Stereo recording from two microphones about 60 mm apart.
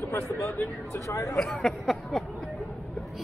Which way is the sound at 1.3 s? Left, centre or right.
Centre.